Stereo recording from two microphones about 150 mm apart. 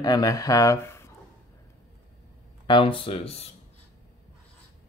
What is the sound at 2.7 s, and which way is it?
Speech, 35° left (ahead or behind).